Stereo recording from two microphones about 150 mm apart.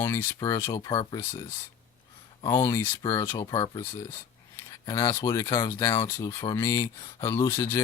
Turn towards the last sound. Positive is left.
turn(degrees=20)  # may be behind; listen again after turning